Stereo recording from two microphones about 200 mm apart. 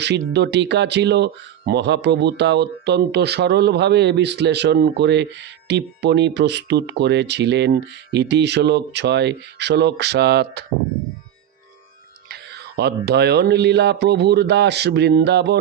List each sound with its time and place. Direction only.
0.0 s speech: 60° right (ahead or behind)
12.3 s speech: 55° right (ahead or behind)